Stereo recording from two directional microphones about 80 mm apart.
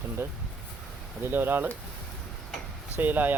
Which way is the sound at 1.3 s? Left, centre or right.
Right.